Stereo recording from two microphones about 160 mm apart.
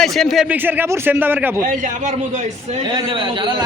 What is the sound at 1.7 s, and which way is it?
A man's voice, 50° right (ahead or behind).